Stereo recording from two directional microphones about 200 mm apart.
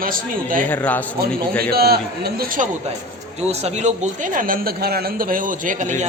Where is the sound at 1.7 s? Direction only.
50° right (ahead or behind).